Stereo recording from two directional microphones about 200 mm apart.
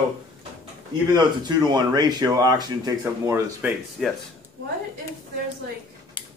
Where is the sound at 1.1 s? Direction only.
20° right (ahead or behind).